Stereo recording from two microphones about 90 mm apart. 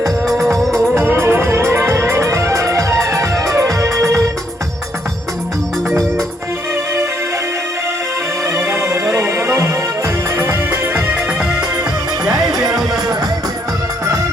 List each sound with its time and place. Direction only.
0.3 s music: centre (ahead or behind)
0.9 s music: 25° right (ahead or behind)
8.4 s music: 30° right (ahead or behind); by 13.1 s 5° right (ahead or behind)